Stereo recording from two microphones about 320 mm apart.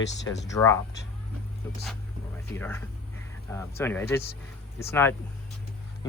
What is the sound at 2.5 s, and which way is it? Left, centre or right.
Speech, centre.